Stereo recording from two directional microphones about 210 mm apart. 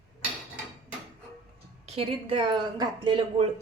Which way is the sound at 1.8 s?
25° right (ahead or behind).